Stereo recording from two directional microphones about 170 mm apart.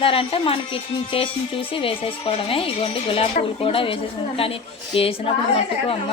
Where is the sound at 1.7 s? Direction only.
30° left (ahead or behind).